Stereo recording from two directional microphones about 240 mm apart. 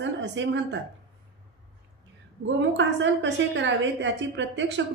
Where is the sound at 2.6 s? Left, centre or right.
Right.